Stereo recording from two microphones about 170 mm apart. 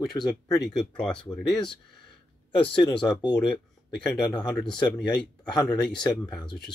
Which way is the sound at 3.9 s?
5° left (ahead or behind).